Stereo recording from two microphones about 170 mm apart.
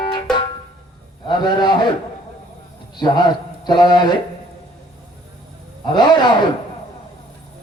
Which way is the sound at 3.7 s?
25° left (ahead or behind).